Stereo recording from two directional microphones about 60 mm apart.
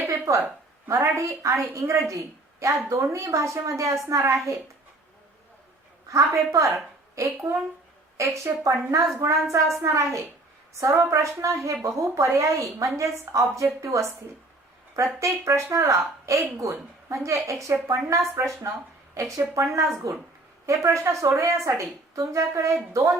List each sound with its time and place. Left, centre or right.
0.0 s a sound: right
0.9 s a woman's voice: right
6.1 s a woman's voice: right
19.5 s a woman's voice: right